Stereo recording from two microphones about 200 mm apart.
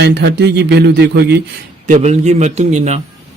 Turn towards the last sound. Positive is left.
turn(degrees=-35)  # may be behind; listen again after turning